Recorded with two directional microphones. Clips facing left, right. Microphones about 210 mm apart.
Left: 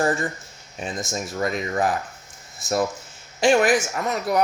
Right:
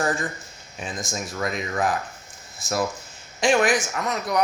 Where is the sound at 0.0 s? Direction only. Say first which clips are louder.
Left 3 dB; 25° left (ahead or behind).